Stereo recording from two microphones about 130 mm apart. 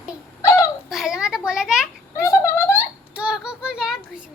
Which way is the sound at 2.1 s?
20° left (ahead or behind).